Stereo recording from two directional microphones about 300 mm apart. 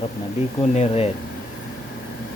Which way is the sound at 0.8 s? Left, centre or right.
Left.